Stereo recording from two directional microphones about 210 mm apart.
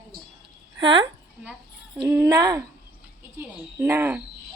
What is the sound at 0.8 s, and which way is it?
A woman's voice, 25° right (ahead or behind).